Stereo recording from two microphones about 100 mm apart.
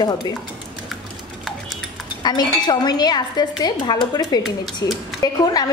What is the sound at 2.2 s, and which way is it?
A woman's voice, 45° left (ahead or behind).